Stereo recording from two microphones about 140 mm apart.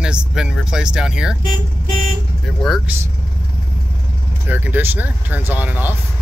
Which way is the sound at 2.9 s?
10° right (ahead or behind).